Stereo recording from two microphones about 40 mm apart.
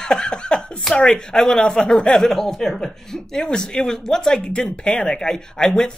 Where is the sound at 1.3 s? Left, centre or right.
Centre.